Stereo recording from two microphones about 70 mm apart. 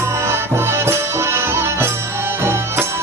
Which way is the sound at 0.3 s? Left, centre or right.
Right.